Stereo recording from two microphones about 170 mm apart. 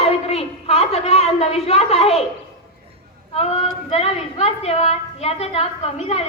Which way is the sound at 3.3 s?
35° left (ahead or behind).